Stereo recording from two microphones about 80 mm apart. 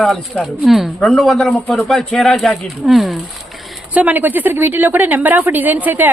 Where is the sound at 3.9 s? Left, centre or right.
Right.